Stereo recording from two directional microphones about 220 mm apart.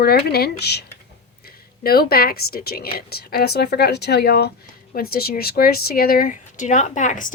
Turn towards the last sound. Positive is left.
turn(degrees=35)  # may be behind; listen again after turning